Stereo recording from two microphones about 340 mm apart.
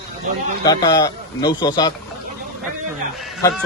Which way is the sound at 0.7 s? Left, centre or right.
Centre.